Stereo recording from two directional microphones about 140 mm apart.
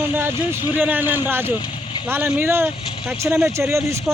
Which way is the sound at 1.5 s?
35° left (ahead or behind).